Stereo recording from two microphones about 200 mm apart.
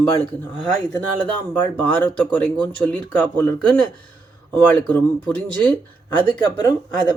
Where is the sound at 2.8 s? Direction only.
10° left (ahead or behind).